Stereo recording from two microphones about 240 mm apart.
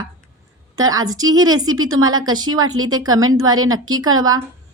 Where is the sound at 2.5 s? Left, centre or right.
Right.